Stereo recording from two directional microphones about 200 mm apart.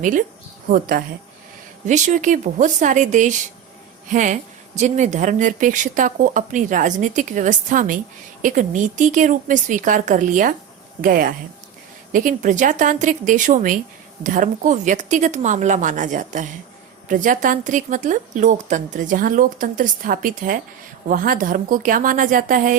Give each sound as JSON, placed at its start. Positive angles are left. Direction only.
{"t": 0.0, "sound": "a woman's voice", "side_deg": -40}